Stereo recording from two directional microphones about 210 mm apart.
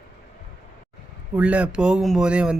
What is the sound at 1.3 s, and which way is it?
Speech, 5° right (ahead or behind).